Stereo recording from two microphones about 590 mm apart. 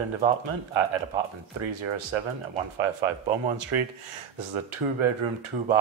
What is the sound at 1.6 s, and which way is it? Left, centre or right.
Speech, right.